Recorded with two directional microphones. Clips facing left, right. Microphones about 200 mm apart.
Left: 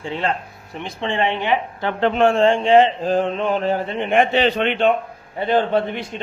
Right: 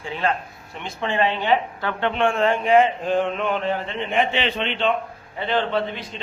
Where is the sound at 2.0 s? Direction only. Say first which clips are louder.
Left 5 dB; 35° left (ahead or behind).